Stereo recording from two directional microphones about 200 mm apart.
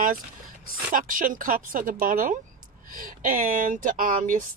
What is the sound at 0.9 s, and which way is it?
Speech, 40° right (ahead or behind).